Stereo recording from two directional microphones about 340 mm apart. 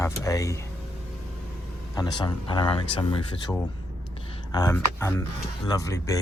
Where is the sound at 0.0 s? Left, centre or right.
Centre.